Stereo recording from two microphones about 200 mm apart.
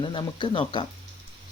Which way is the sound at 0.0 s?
25° left (ahead or behind).